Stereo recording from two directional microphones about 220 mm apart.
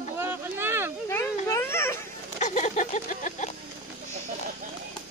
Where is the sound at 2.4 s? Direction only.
35° left (ahead or behind).